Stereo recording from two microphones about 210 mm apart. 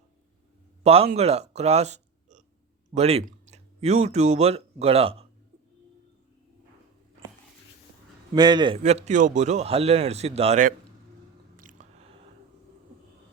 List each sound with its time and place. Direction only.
0.9 s speech: 30° right (ahead or behind)
8.3 s a man's voice: 20° right (ahead or behind)
8.8 s a man's voice: 35° right (ahead or behind)
11.6 s biting: 35° right (ahead or behind)